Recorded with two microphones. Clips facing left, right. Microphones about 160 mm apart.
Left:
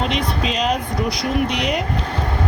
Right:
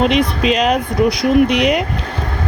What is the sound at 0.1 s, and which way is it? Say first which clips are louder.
Speech: right 7 dB; 70° right (ahead or behind).